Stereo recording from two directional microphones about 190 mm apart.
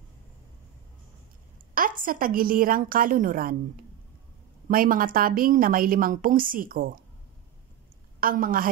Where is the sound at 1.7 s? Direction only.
45° right (ahead or behind).